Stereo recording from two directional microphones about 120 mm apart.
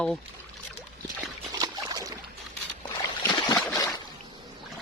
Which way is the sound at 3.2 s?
40° left (ahead or behind).